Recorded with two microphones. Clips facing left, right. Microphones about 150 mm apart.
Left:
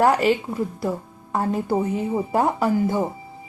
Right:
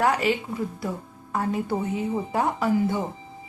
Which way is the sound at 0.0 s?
45° left (ahead or behind).